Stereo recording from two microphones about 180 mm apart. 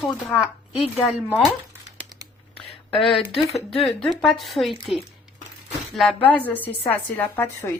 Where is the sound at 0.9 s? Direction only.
Centre (ahead or behind).